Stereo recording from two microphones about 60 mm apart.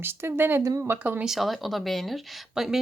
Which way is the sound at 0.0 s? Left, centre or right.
Right.